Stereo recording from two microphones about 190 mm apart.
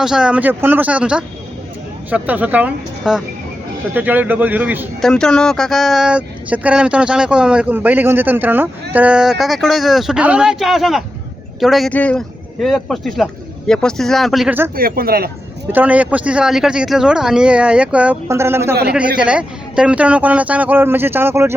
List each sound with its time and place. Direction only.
0.0 s speech: 5° right (ahead or behind)
4.9 s speech: 5° left (ahead or behind)
14.8 s speech: 50° right (ahead or behind)
15.7 s speech: 10° right (ahead or behind)